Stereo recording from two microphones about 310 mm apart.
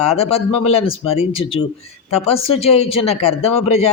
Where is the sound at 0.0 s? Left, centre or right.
Centre.